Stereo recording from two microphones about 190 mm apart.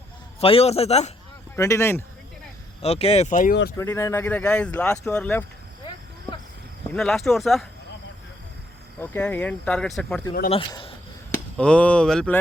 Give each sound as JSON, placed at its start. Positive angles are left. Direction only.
{"t": 0.3, "sound": "speech", "side_deg": 30}
{"t": 1.5, "sound": "speech", "side_deg": 15}
{"t": 2.8, "sound": "speech", "side_deg": 35}
{"t": 3.8, "sound": "speech", "side_deg": 15}
{"t": 6.9, "sound": "speech", "side_deg": 0}
{"t": 9.0, "sound": "speech", "side_deg": 10}
{"t": 10.5, "sound": "speech", "side_deg": 30}
{"t": 11.5, "sound": "speech", "side_deg": 5}